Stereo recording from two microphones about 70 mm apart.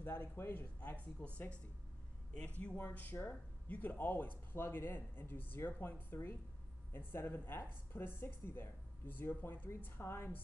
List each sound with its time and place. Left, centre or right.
0.0 s speech: left
1.2 s speech: centre
2.6 s speech: left